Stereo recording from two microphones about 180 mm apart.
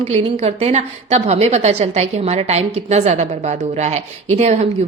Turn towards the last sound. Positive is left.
turn(degrees=-40)  # may be behind; listen again after turning